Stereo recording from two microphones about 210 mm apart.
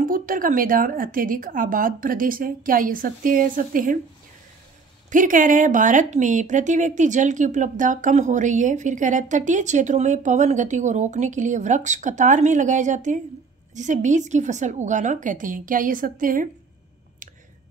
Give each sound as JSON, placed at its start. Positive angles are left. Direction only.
{"t": 0.0, "sound": "speech", "side_deg": -40}
{"t": 5.1, "sound": "speech", "side_deg": -40}